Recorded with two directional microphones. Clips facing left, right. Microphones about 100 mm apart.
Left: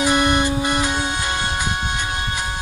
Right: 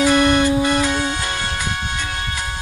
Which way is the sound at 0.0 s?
20° left (ahead or behind).